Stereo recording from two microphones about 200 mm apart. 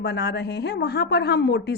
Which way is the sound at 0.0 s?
55° left (ahead or behind).